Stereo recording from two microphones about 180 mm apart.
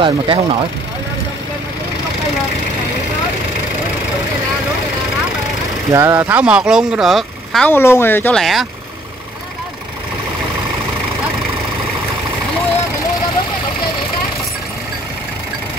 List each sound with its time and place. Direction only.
0.0 s speech: 30° right (ahead or behind)
5.9 s speech: 15° right (ahead or behind); by 8.6 s centre (ahead or behind)